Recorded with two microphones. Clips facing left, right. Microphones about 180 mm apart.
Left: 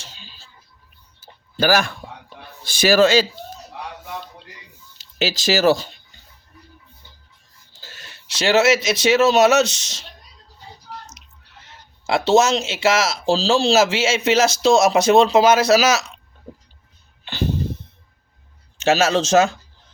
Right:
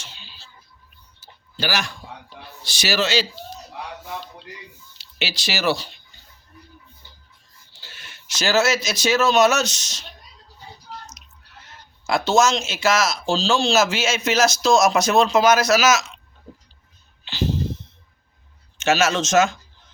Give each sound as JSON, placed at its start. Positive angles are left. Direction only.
{"t": 0.0, "sound": "a sound", "side_deg": 45}
{"t": 2.4, "sound": "a man's voice", "side_deg": 50}
{"t": 4.9, "sound": "speech", "side_deg": 45}
{"t": 7.7, "sound": "speech", "side_deg": 40}
{"t": 12.0, "sound": "speech", "side_deg": 30}
{"t": 17.2, "sound": "a sound", "side_deg": 55}
{"t": 18.8, "sound": "speech", "side_deg": 35}